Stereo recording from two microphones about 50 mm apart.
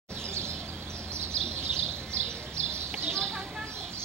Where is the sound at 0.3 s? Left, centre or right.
Right.